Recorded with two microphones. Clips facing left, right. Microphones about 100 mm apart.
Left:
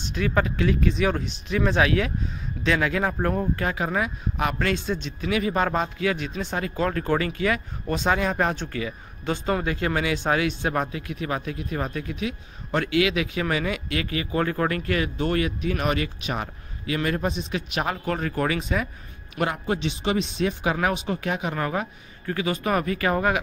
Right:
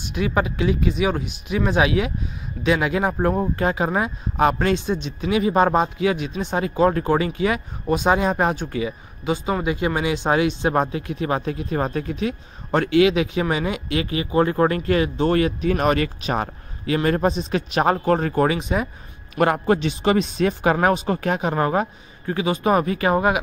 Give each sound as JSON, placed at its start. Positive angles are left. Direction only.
{"t": 0.0, "sound": "speech", "side_deg": -15}
{"t": 9.2, "sound": "speech", "side_deg": -5}
{"t": 19.3, "sound": "speech", "side_deg": -50}